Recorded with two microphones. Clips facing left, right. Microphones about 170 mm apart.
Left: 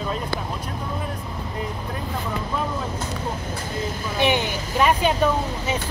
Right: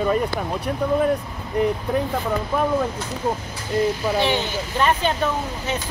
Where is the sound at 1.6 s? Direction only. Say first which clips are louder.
Right 12 dB; 65° right (ahead or behind).